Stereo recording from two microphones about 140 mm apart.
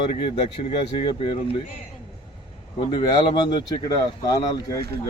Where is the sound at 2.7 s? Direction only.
35° left (ahead or behind).